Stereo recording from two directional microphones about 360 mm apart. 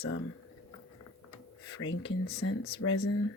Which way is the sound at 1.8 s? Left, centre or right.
Left.